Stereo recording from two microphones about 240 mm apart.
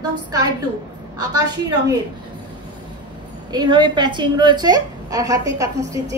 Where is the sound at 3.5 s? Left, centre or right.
Centre.